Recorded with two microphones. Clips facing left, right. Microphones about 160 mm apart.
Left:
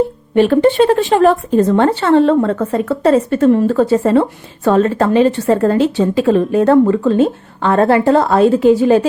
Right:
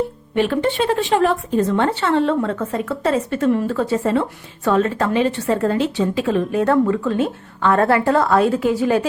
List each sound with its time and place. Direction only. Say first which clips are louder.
0.3 s speech: left 8 dB; 40° left (ahead or behind)